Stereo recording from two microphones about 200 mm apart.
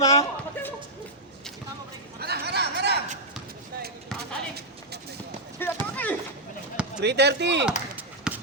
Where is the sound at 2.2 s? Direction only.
55° right (ahead or behind).